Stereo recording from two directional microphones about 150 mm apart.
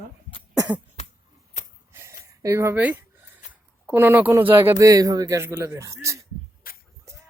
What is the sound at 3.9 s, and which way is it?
Speech, 15° right (ahead or behind).